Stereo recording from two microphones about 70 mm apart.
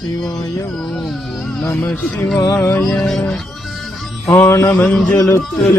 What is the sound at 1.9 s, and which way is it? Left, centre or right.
Speech, left.